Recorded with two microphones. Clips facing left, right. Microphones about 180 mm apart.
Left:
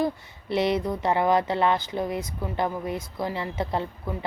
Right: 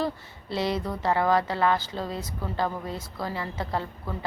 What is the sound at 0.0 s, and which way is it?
Speech, 20° left (ahead or behind).